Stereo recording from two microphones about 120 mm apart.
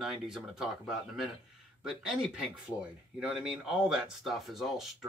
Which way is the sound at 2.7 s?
25° left (ahead or behind).